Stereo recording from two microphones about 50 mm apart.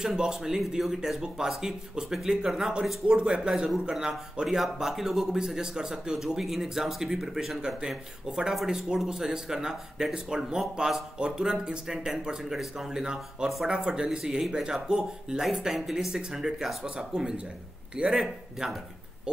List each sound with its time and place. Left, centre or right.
0.0 s speech: centre
19.3 s speech: centre